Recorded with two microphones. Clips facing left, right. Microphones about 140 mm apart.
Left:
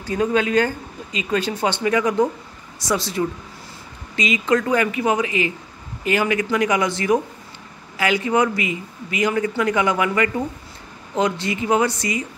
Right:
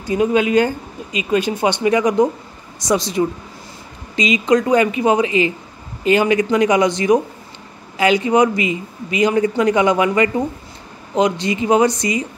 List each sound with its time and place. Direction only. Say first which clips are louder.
0.0 s speech: right 4 dB; 15° right (ahead or behind)